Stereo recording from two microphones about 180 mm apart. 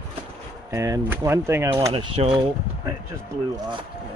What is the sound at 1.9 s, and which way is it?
Speech, 30° right (ahead or behind).